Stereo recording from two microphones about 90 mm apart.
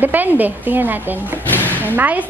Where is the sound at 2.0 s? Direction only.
20° right (ahead or behind).